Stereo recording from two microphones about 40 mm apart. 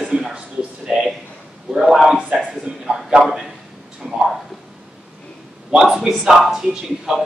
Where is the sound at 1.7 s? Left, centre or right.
Centre.